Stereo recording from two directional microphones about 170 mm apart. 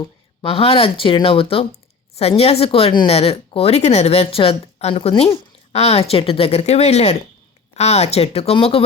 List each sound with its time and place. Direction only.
0.4 s a woman's voice: 35° left (ahead or behind)